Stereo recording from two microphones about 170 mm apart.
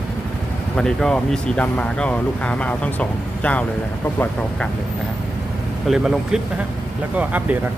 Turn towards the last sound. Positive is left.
turn(degrees=-10)  # may be behind; listen again after turning